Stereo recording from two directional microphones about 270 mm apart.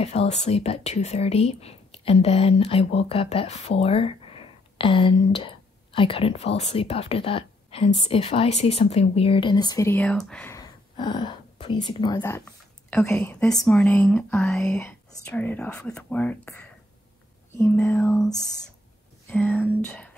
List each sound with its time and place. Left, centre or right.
0.0 s speech: left; by 16.5 s centre
17.6 s speech: centre
19.3 s speech: centre